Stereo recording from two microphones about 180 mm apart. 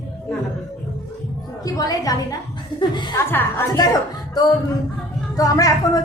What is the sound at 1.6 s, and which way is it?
A woman's voice, 20° left (ahead or behind).